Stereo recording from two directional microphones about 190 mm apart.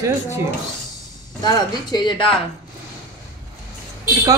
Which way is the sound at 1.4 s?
25° left (ahead or behind).